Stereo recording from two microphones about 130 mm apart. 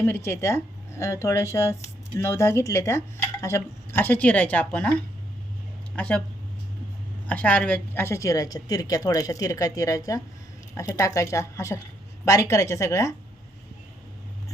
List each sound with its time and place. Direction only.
0.0 s a woman's voice: 20° left (ahead or behind)
6.0 s speech: 10° left (ahead or behind)
7.3 s a woman's voice: 10° left (ahead or behind)